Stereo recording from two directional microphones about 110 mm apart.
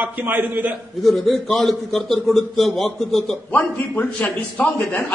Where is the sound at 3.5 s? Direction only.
15° left (ahead or behind).